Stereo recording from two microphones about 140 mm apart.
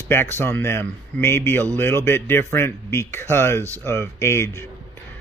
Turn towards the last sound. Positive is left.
turn(degrees=20)  # may be behind; listen again after turning